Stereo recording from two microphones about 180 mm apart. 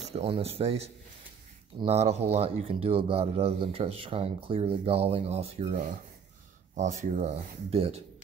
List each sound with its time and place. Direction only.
0.1 s speech: 35° right (ahead or behind)
6.8 s speech: 40° right (ahead or behind)